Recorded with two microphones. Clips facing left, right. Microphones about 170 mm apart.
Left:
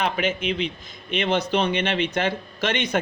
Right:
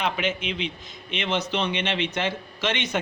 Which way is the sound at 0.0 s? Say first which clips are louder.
Left 3 dB; 45° left (ahead or behind).